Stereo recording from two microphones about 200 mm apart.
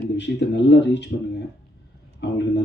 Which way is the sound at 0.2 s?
60° left (ahead or behind).